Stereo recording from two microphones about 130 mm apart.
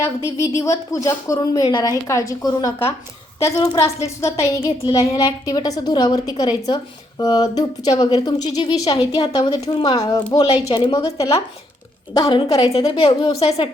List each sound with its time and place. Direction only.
0.0 s a woman's voice: 20° left (ahead or behind)
12.7 s a woman's voice: 45° left (ahead or behind)